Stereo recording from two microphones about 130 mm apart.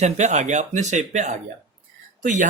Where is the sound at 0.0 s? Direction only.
65° right (ahead or behind).